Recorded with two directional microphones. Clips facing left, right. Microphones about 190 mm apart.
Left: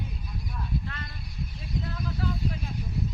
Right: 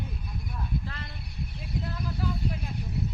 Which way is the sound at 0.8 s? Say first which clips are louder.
Left 1 dB; 30° right (ahead or behind).